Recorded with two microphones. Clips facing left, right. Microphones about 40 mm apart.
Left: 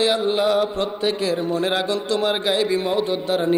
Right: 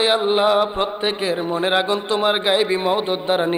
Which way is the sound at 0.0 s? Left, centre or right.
Right.